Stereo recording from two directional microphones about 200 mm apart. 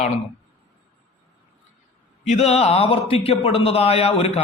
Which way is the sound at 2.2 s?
35° left (ahead or behind).